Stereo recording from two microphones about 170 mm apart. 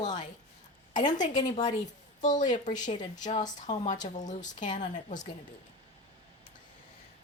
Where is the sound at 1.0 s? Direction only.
25° left (ahead or behind).